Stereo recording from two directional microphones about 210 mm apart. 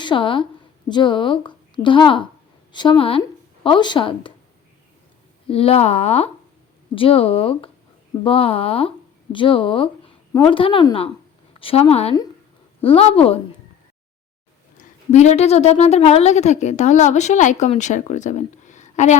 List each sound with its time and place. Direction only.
0.0 s a woman's voice: 25° left (ahead or behind)
5.5 s speech: 25° left (ahead or behind)
15.1 s a woman's voice: 35° left (ahead or behind)